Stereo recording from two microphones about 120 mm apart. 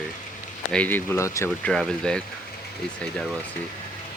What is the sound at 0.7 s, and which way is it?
Speech, 15° left (ahead or behind).